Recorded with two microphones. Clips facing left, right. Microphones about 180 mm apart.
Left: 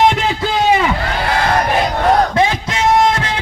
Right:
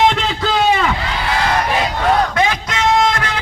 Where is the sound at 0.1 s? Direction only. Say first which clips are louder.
Left 1 dB; 10° left (ahead or behind).